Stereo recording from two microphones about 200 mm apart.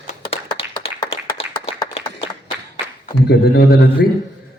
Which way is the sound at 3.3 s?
50° left (ahead or behind).